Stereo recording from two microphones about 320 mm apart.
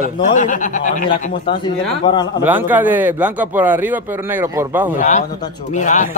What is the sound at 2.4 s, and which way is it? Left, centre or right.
Speech, centre.